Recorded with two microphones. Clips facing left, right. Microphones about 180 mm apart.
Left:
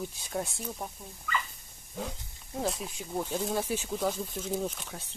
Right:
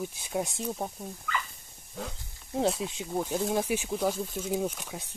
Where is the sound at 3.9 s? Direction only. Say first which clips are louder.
Right 1 dB; centre (ahead or behind).